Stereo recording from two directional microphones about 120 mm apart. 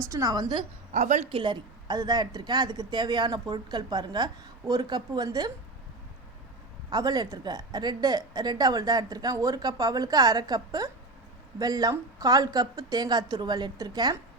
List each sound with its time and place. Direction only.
0.1 s a woman's voice: 25° right (ahead or behind)
0.9 s speech: 85° right
1.3 s a woman's voice: 40° right (ahead or behind)
6.9 s a woman's voice: 35° right (ahead or behind)